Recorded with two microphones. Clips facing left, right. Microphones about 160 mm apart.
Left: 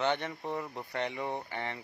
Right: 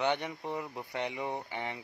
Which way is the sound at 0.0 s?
15° right (ahead or behind).